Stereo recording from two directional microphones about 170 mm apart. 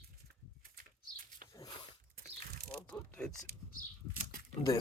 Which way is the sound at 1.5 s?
20° left (ahead or behind).